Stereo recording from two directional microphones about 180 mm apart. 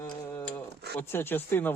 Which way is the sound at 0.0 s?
15° left (ahead or behind).